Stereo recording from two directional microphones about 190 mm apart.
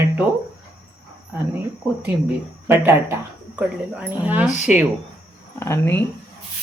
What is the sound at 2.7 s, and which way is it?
Speech, 10° right (ahead or behind).